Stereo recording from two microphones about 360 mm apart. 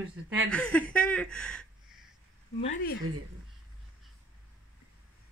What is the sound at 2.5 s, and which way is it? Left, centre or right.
Speech, centre.